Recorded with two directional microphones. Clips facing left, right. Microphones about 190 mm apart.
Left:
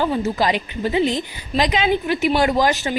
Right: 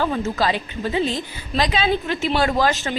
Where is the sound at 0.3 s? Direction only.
15° left (ahead or behind).